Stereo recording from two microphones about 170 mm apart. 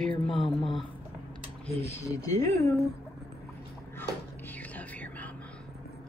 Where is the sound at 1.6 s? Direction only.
40° left (ahead or behind).